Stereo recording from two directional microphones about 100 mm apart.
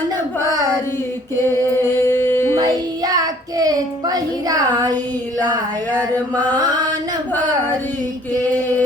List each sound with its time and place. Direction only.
0.4 s a sound: 35° right (ahead or behind)
1.5 s music: 25° left (ahead or behind)
2.6 s child singing: 40° right (ahead or behind)
8.3 s chant: 35° right (ahead or behind)